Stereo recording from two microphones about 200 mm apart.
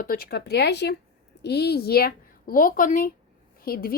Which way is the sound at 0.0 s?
50° left (ahead or behind).